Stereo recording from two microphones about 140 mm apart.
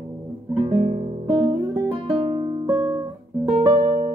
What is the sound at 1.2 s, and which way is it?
Music, 30° right (ahead or behind).